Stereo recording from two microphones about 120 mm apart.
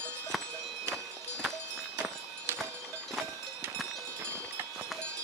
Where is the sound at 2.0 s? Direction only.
15° right (ahead or behind).